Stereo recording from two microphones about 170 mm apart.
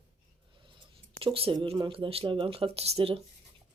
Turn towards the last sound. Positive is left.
turn(degrees=-35)  # may be behind; listen again after turning